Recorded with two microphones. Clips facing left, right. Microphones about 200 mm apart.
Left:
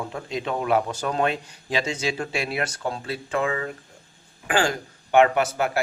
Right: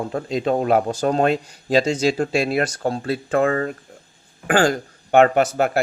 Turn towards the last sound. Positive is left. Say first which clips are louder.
# right 4 dB
turn(degrees=-50)  # may be behind; listen again after turning